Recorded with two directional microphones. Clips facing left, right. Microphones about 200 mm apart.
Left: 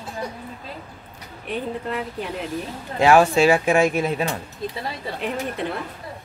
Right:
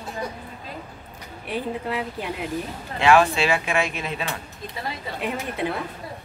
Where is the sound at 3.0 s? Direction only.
40° left (ahead or behind).